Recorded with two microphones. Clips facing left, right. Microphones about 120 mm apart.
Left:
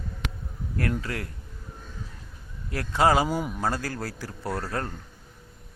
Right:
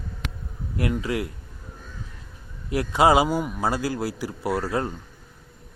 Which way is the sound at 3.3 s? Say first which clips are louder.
Right 3 dB; 5° right (ahead or behind).